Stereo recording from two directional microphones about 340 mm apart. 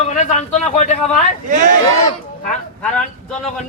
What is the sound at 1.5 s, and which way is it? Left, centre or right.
Speech, right.